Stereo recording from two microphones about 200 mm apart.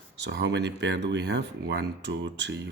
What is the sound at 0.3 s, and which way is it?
Speech, 60° right (ahead or behind).